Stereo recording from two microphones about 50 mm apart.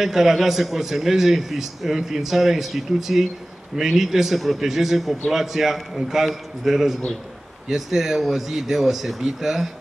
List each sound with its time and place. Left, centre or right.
0.0 s a man's voice: centre